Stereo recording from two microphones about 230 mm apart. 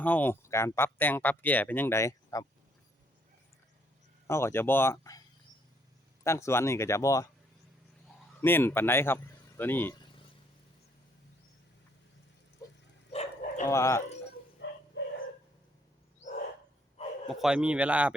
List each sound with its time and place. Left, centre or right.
0.0 s speech: centre
4.3 s speech: centre
6.2 s speech: centre
8.4 s speech: centre
13.1 s bow-wow: left
13.7 s speech: centre
14.6 s dog: left
17.2 s speech: centre